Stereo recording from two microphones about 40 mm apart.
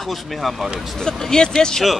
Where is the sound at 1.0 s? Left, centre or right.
Centre.